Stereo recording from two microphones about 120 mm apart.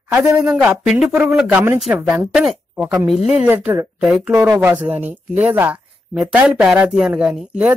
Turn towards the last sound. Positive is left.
turn(degrees=-10)  # may be behind; listen again after turning